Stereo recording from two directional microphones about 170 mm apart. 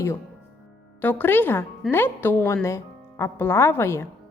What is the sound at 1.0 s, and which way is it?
Speech, 10° left (ahead or behind).